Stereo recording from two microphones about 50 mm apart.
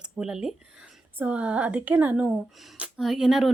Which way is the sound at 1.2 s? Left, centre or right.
Right.